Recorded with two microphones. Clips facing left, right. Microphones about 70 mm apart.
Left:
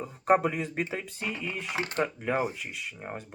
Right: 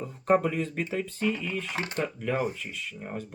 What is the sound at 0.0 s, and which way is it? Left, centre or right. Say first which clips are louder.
Speech: even; centre.